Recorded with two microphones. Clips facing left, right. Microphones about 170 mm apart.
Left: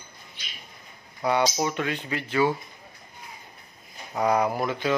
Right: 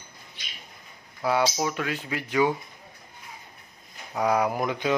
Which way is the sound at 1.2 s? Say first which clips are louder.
Left 1 dB; 5° right (ahead or behind).